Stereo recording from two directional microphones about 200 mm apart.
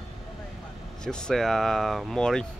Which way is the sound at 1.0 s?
5° left (ahead or behind).